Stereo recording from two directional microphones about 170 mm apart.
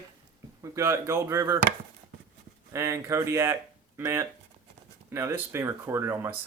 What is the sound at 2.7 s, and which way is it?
Speech, 15° right (ahead or behind).